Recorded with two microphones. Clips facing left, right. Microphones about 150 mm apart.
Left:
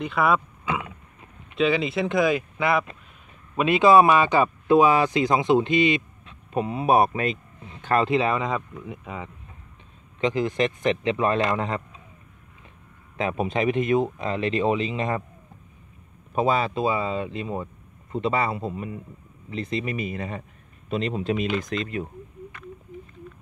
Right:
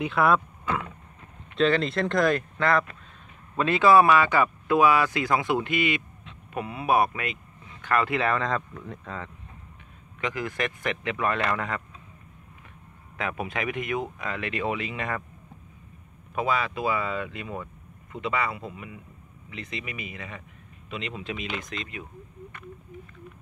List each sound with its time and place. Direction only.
0.0 s speech: centre (ahead or behind); by 11.8 s 25° left (ahead or behind)
13.2 s speech: 25° left (ahead or behind)
16.3 s speech: 30° left (ahead or behind)